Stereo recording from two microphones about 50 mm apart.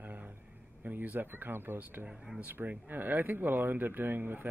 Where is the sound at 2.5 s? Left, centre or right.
Right.